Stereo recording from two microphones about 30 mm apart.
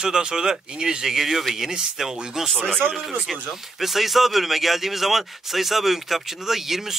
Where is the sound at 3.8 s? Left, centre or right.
Centre.